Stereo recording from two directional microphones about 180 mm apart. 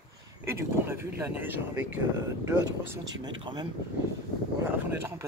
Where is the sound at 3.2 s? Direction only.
25° right (ahead or behind).